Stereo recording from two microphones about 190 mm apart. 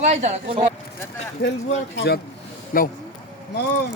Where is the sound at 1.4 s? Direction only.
60° left (ahead or behind).